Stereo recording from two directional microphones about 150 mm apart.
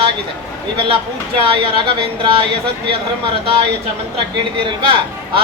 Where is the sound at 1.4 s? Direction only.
40° right (ahead or behind).